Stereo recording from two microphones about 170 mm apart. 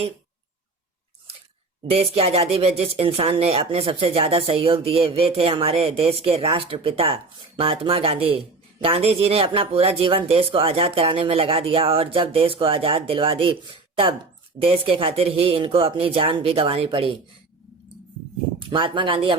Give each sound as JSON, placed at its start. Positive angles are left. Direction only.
{"t": 2.1, "sound": "speech", "side_deg": -35}
{"t": 18.7, "sound": "speech", "side_deg": -30}